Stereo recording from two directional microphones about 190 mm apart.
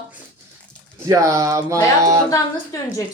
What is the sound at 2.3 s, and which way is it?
Speech, 15° left (ahead or behind).